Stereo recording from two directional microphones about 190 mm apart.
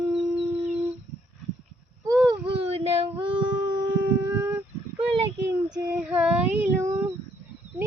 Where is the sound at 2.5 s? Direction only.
30° right (ahead or behind).